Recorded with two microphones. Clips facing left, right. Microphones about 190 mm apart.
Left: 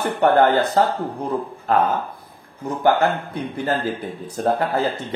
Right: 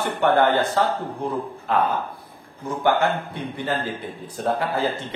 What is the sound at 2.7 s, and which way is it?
A man's voice, 40° left (ahead or behind).